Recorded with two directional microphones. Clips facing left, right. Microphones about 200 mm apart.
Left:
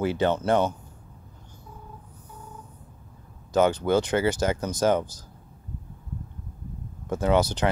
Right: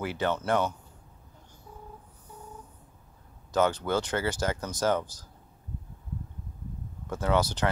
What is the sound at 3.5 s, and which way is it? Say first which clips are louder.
Speech: left 5 dB; 15° left (ahead or behind).